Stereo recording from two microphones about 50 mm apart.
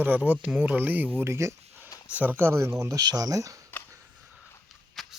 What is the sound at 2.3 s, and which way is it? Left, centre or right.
Speech, right.